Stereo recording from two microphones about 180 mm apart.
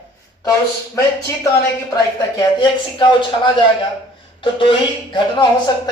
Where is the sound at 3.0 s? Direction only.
25° left (ahead or behind).